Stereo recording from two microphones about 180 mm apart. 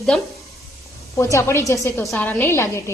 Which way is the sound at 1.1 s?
15° left (ahead or behind).